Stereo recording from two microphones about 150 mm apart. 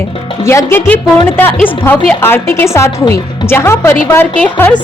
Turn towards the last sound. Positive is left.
turn(degrees=10)  # may be behind; listen again after turning